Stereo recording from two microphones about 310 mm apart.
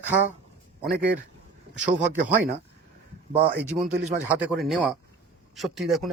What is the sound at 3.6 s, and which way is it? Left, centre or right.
Speech, centre.